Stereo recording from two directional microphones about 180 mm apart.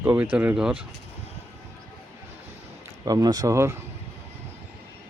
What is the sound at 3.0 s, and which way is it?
Speech, 20° right (ahead or behind).